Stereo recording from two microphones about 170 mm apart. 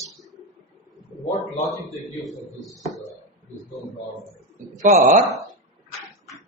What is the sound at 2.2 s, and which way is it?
Speech, centre (ahead or behind).